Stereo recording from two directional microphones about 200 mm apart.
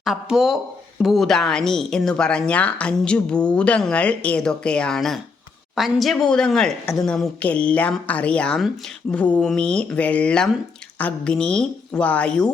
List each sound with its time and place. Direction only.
0.0 s speech: centre (ahead or behind)